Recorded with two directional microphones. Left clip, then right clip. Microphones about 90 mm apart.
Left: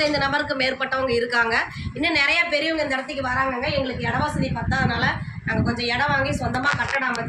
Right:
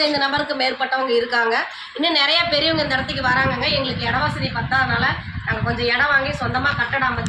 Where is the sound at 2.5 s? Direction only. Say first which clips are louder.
Right 4 dB; 35° right (ahead or behind).